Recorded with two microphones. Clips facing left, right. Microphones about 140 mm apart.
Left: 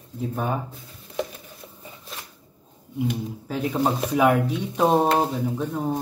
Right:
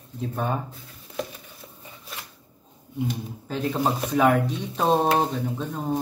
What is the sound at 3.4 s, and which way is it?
Speech, 10° left (ahead or behind).